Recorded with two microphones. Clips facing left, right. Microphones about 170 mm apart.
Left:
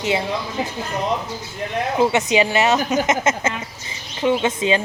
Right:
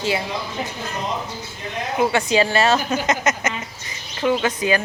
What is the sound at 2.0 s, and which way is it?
A woman's voice, 20° left (ahead or behind).